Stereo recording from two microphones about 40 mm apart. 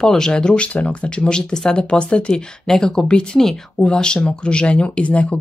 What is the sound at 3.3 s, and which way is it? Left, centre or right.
Speech, centre.